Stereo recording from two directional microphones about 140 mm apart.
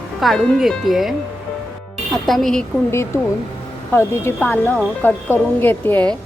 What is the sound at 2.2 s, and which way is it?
Speech, centre (ahead or behind).